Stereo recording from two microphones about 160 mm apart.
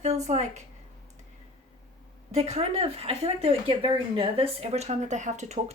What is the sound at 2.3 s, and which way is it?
Speech, 40° right (ahead or behind).